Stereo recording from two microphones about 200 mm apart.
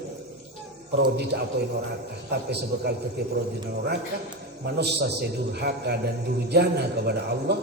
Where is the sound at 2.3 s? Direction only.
55° right (ahead or behind).